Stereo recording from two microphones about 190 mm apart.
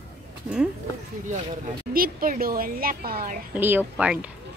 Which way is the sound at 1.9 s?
50° right (ahead or behind).